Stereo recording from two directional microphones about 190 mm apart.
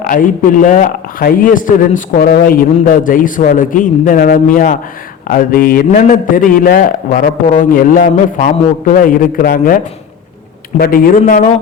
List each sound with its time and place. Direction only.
0.0 s speech: 45° left (ahead or behind)